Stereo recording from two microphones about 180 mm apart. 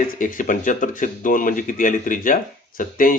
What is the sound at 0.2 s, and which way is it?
Speech, 45° left (ahead or behind).